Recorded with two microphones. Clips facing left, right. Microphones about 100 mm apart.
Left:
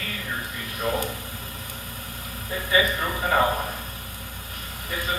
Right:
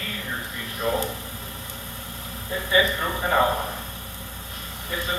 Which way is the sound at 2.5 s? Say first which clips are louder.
Right 1 dB; 30° right (ahead or behind).